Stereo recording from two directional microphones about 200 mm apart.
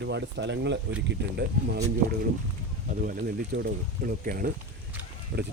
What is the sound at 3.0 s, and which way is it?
Speech, 45° right (ahead or behind).